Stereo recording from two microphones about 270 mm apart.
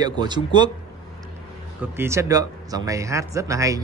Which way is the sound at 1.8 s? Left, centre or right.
Centre.